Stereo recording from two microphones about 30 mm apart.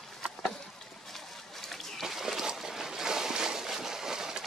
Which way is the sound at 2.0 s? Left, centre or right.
Centre.